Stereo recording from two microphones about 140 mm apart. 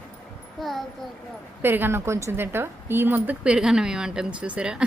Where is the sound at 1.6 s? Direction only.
15° right (ahead or behind).